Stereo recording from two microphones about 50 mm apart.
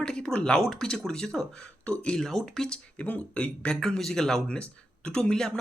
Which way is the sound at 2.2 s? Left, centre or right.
Centre.